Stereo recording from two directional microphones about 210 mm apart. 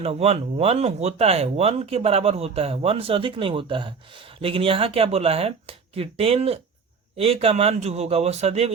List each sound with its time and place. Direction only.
0.0 s speech: 30° right (ahead or behind)